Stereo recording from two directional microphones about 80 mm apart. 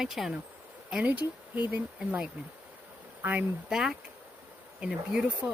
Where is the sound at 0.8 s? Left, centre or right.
Centre.